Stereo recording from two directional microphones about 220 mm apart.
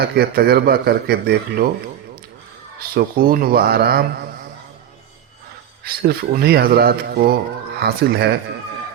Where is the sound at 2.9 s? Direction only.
40° right (ahead or behind).